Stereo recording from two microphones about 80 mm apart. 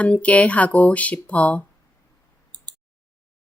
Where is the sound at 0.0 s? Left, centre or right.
Centre.